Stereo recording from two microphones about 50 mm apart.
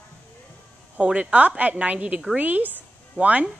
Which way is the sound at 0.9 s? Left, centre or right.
Right.